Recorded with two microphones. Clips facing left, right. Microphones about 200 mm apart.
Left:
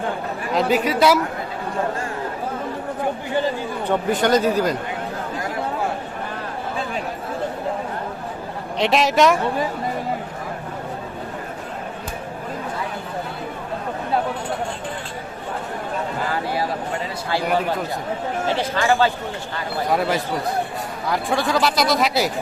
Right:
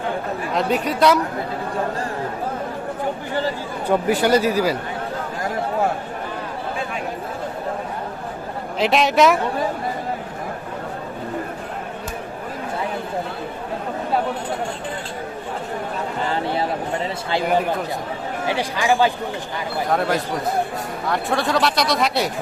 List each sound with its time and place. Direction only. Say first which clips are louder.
0.5 s speech: left 3 dB; centre (ahead or behind)
3.8 s speech: right 2 dB; 10° right (ahead or behind)
8.8 s speech: right 1 dB; centre (ahead or behind)
16.3 s a sound: right 3 dB; 25° right (ahead or behind)
18.4 s speech: even; 15° right (ahead or behind)
19.9 s speech: even; 5° left (ahead or behind)